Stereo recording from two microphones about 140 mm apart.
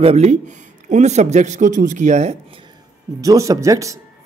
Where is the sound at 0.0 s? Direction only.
50° right (ahead or behind).